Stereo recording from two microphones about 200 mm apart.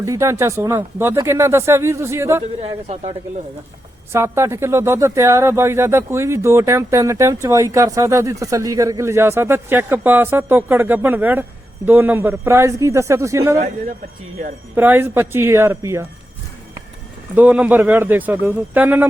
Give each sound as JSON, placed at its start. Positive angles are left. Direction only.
{"t": 0.0, "sound": "speech", "side_deg": -15}
{"t": 2.6, "sound": "speech", "side_deg": -30}
{"t": 4.1, "sound": "speech", "side_deg": -15}
{"t": 14.8, "sound": "speech", "side_deg": -10}
{"t": 17.3, "sound": "speech", "side_deg": -10}